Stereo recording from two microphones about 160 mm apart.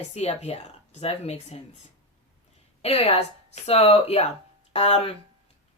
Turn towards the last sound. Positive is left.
turn(degrees=40)  # may be behind; listen again after turning